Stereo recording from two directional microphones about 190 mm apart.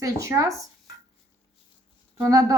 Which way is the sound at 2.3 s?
15° right (ahead or behind).